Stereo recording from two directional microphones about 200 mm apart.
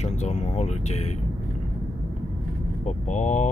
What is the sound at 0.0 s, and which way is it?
Speech, 35° left (ahead or behind).